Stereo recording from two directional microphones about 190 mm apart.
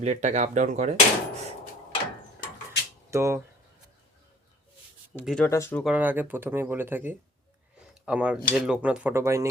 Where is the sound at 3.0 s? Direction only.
15° right (ahead or behind).